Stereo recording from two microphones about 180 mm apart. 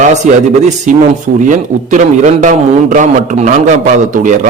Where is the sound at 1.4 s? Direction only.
45° right (ahead or behind).